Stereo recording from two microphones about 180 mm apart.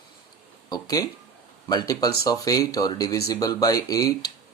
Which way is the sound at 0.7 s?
20° left (ahead or behind).